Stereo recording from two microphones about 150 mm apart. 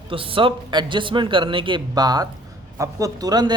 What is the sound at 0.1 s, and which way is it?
Speech, 35° right (ahead or behind).